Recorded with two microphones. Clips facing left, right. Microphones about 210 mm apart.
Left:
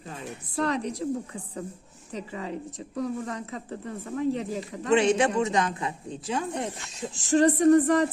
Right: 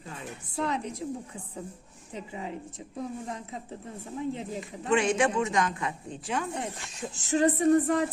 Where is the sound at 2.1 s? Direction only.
75° left (ahead or behind).